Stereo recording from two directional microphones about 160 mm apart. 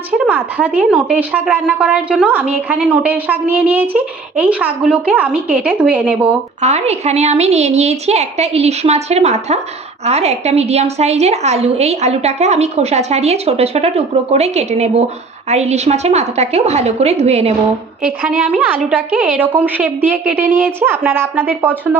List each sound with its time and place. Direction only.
0.3 s a woman's voice: 10° right (ahead or behind)
6.6 s a woman's voice: 45° right (ahead or behind)
18.0 s a woman's voice: 10° right (ahead or behind)